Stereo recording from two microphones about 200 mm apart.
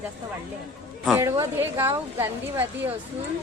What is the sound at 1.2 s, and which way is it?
A woman's voice, 15° right (ahead or behind).